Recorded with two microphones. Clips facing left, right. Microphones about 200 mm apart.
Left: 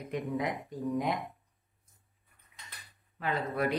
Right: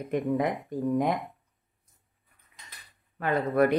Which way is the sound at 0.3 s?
50° right (ahead or behind).